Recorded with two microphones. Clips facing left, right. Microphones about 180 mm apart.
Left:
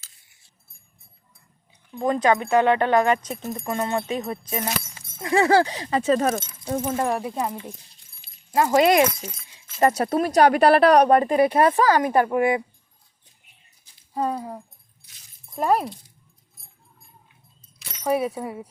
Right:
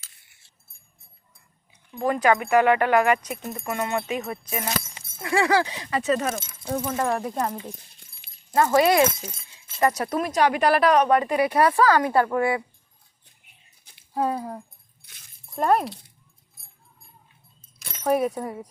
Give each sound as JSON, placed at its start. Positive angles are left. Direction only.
{"t": 0.0, "sound": "keys jangling", "side_deg": -65}
{"t": 2.0, "sound": "speech", "side_deg": 20}
{"t": 3.3, "sound": "speech", "side_deg": 0}
{"t": 3.7, "sound": "speech", "side_deg": 25}
{"t": 6.9, "sound": "speech", "side_deg": 15}
{"t": 8.5, "sound": "speech", "side_deg": 20}
{"t": 14.1, "sound": "speech", "side_deg": -5}
{"t": 15.0, "sound": "dog", "side_deg": -60}
{"t": 15.5, "sound": "speech", "side_deg": 5}
{"t": 18.0, "sound": "speech", "side_deg": 5}